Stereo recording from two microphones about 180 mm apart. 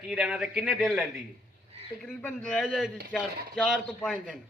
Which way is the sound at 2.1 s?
5° left (ahead or behind).